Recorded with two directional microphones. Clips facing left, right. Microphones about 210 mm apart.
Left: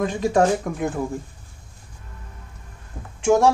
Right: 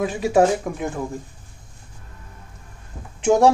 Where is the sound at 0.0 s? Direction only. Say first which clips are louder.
Right 1 dB; 5° right (ahead or behind).